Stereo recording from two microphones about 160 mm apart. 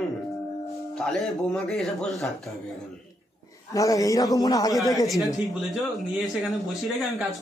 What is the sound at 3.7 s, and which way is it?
A man's voice, 20° left (ahead or behind).